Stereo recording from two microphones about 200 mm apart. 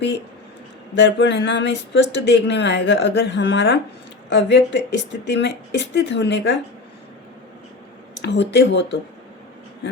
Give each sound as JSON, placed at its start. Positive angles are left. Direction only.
{"t": 0.9, "sound": "speech", "side_deg": 65}
{"t": 8.2, "sound": "speech", "side_deg": 60}